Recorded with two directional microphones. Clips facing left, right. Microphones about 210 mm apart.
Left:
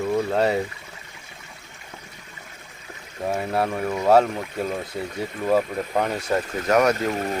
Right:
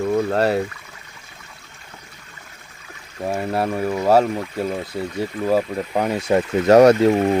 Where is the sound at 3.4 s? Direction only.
5° right (ahead or behind).